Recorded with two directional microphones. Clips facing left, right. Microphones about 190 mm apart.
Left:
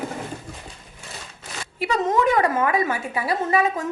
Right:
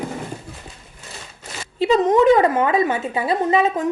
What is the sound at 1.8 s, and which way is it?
A woman's voice, 20° right (ahead or behind).